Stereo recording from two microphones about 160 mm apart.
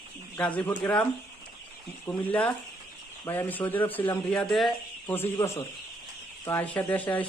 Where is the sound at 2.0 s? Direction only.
10° left (ahead or behind).